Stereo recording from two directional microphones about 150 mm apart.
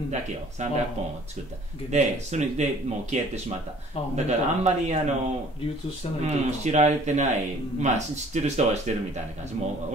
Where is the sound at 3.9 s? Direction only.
40° left (ahead or behind).